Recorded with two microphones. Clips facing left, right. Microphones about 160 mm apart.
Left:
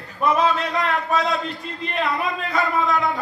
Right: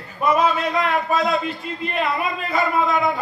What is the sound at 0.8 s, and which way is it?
Speech, 5° right (ahead or behind).